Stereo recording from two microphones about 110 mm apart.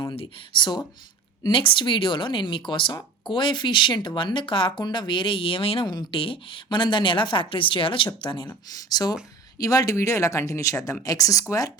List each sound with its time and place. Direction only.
0.2 s speech: 50° left (ahead or behind)
8.4 s speech: 35° left (ahead or behind)